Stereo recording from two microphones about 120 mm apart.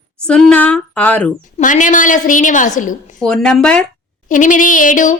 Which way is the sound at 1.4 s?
90° left.